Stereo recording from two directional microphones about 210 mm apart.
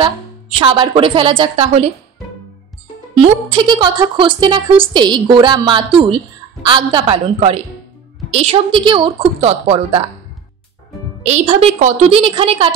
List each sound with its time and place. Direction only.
0.0 s a woman's voice: 25° right (ahead or behind)
3.2 s a woman's voice: 25° right (ahead or behind)
11.2 s a woman's voice: 30° right (ahead or behind)